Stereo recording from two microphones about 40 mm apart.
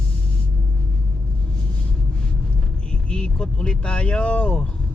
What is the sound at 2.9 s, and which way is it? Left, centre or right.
Vehicle, left.